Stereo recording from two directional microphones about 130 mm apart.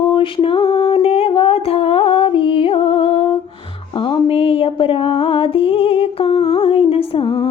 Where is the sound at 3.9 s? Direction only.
40° left (ahead or behind).